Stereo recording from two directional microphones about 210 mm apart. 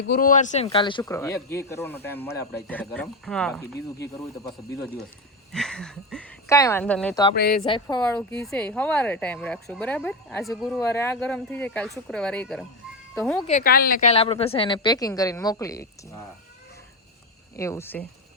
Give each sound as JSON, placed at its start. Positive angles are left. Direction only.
{"t": 0.1, "sound": "speech", "side_deg": 40}
{"t": 5.5, "sound": "a sound", "side_deg": 0}
{"t": 6.5, "sound": "speech", "side_deg": 15}
{"t": 7.3, "sound": "a woman's voice", "side_deg": 45}
{"t": 7.6, "sound": "speech", "side_deg": 20}
{"t": 10.8, "sound": "speech", "side_deg": 10}
{"t": 13.1, "sound": "a sound", "side_deg": 0}
{"t": 13.5, "sound": "a woman's voice", "side_deg": 40}
{"t": 14.1, "sound": "speech", "side_deg": 25}
{"t": 17.6, "sound": "speech", "side_deg": 15}